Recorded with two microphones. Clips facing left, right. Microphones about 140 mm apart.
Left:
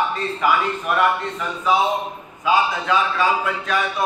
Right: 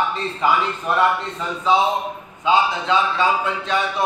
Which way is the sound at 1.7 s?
25° right (ahead or behind).